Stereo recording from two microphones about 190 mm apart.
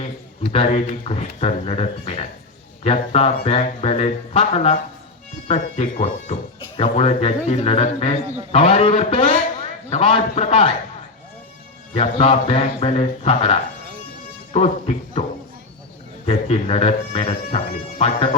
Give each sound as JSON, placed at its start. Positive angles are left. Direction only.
{"t": 0.5, "sound": "speech", "side_deg": 30}
{"t": 11.9, "sound": "speech", "side_deg": 30}
{"t": 16.2, "sound": "speech", "side_deg": 30}